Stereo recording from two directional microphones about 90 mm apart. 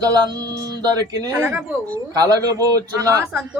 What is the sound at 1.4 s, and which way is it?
Speech, 25° right (ahead or behind).